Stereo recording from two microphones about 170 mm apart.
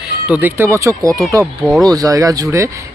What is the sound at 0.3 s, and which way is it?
Speech, 10° right (ahead or behind).